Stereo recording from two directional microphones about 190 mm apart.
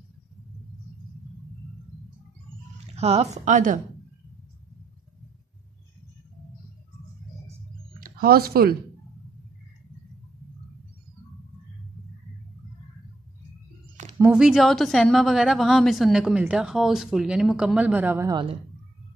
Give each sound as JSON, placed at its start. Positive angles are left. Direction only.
{"t": 2.9, "sound": "a woman's voice", "side_deg": -35}
{"t": 8.0, "sound": "speech", "side_deg": -50}
{"t": 14.1, "sound": "a sound", "side_deg": -15}
{"t": 14.4, "sound": "a woman's voice", "side_deg": 0}
{"t": 18.3, "sound": "a woman's voice", "side_deg": -25}